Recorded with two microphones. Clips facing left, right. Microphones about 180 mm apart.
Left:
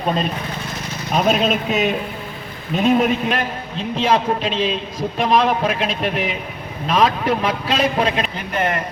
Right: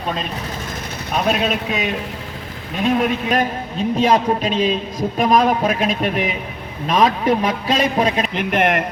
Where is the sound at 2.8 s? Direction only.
Centre (ahead or behind).